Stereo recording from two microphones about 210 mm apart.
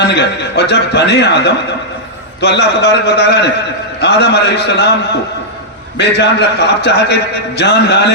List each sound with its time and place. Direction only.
0.0 s a man's voice: 55° left (ahead or behind)
6.0 s a man's voice: 55° left (ahead or behind)